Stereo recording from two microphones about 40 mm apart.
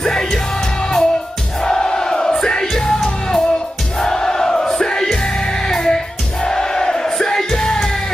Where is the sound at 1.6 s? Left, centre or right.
Centre.